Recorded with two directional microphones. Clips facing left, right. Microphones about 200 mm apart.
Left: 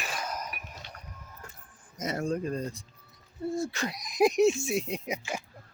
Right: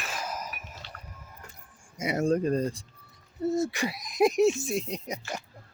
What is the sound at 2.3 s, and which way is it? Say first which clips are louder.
Speech: right 8 dB; 35° right (ahead or behind).